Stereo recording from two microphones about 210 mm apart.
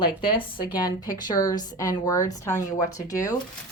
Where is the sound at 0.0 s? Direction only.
25° left (ahead or behind).